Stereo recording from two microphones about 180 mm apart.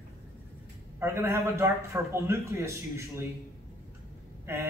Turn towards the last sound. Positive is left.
turn(degrees=-15)  # may be behind; listen again after turning